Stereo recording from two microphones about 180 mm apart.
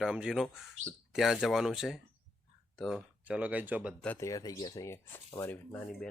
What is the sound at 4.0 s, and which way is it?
Speech, 10° left (ahead or behind).